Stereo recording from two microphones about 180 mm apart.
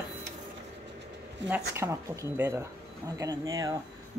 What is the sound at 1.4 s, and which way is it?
Speech, 85° right.